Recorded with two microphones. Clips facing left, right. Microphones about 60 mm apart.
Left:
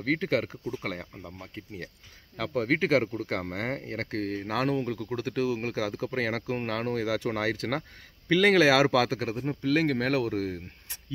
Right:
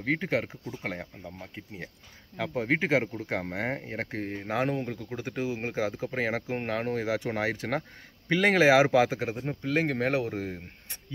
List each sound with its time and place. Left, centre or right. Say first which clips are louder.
0.0 s speech: left 1 dB; centre
2.3 s speech: left 1 dB; centre